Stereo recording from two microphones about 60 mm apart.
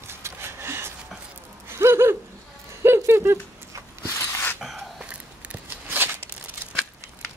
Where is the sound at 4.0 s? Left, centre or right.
Left.